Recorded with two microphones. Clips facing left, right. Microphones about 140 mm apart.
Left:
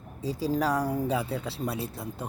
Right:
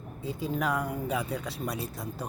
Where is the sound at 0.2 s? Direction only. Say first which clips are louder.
Left 4 dB; 35° left (ahead or behind).